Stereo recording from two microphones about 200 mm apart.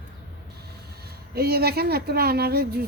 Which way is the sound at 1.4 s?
50° right (ahead or behind).